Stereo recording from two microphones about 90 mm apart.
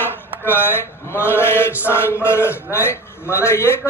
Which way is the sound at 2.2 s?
30° left (ahead or behind).